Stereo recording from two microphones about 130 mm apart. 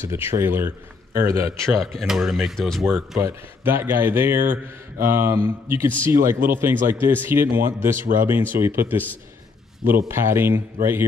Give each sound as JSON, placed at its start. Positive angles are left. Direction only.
{"t": 0.1, "sound": "speech", "side_deg": -20}
{"t": 1.7, "sound": "speech", "side_deg": 0}
{"t": 3.2, "sound": "speech", "side_deg": -20}